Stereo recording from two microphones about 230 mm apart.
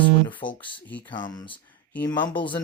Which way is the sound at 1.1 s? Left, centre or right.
Centre.